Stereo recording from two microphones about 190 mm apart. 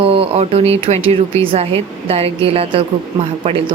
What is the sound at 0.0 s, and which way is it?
A woman's voice, 30° right (ahead or behind).